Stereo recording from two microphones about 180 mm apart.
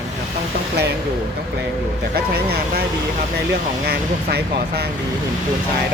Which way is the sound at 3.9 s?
60° right (ahead or behind).